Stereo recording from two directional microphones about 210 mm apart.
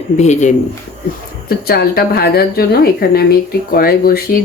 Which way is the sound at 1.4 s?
45° left (ahead or behind).